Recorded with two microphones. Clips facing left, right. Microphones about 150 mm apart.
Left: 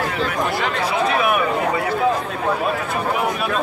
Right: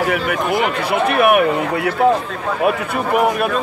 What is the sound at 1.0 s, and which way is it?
Speech, 65° right (ahead or behind).